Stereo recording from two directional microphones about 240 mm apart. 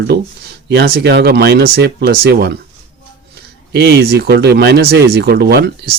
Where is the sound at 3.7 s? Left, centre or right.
Right.